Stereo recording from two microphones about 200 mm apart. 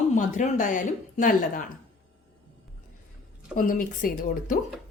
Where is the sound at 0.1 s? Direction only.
40° left (ahead or behind).